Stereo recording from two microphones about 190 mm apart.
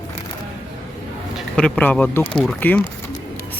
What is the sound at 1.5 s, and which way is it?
Speech, 5° left (ahead or behind).